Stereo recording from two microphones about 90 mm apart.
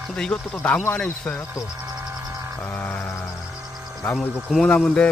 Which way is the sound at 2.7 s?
20° left (ahead or behind).